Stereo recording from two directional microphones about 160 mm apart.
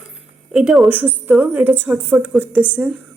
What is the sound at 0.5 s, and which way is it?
A woman's voice, centre (ahead or behind).